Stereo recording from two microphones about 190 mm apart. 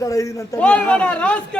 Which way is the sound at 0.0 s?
15° left (ahead or behind).